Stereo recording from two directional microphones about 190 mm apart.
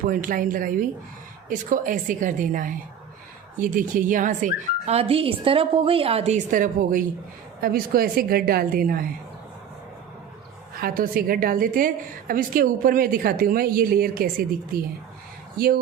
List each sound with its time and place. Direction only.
0.0 s a woman's voice: 45° right (ahead or behind)
10.8 s a woman's voice: 50° right (ahead or behind)
15.5 s a woman's voice: 50° right (ahead or behind)